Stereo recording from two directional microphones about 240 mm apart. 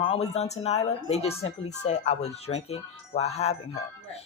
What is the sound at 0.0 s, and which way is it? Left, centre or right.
Speech, left.